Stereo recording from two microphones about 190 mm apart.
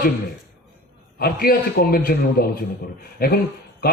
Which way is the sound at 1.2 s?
55° left (ahead or behind).